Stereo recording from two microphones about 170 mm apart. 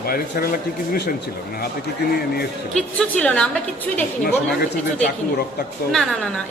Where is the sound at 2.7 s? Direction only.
5° left (ahead or behind).